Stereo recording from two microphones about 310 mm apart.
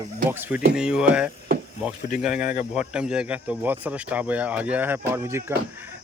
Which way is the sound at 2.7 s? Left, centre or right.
Centre.